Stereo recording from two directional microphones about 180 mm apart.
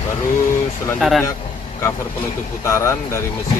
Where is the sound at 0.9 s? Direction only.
Centre (ahead or behind).